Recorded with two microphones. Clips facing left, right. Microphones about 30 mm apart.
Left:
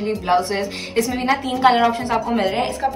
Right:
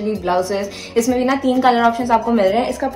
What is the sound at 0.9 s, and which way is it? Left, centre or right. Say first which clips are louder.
Speech: right 5 dB; left.